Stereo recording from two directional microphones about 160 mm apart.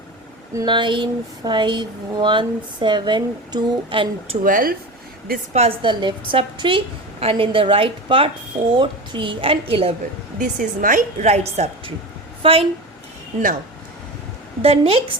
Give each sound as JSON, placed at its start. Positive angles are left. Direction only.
{"t": 0.5, "sound": "speech", "side_deg": -30}
{"t": 4.4, "sound": "speech", "side_deg": -60}
{"t": 5.5, "sound": "a woman's voice", "side_deg": -35}
{"t": 10.6, "sound": "a woman's voice", "side_deg": -55}
{"t": 14.6, "sound": "a woman's voice", "side_deg": -40}